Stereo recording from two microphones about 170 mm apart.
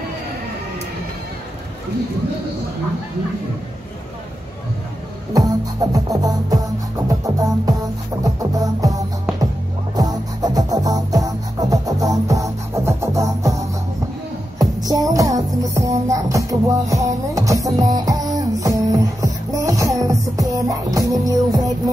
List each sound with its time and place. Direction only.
5.3 s music: 20° right (ahead or behind)